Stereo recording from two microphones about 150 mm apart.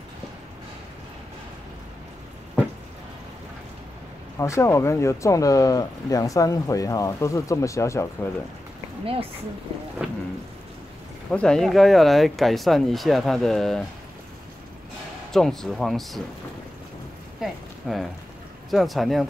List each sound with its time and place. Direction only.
4.4 s speech: 20° left (ahead or behind)
10.0 s a sound: 5° right (ahead or behind)
11.2 s speech: 5° left (ahead or behind)
15.3 s speech: 5° left (ahead or behind)
17.4 s speech: centre (ahead or behind)